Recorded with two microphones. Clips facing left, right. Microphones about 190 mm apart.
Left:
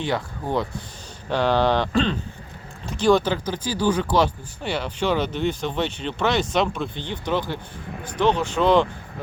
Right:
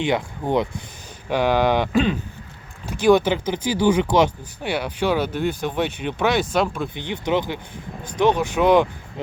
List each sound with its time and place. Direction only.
0.0 s speech: 20° right (ahead or behind)
6.9 s speech: 15° right (ahead or behind)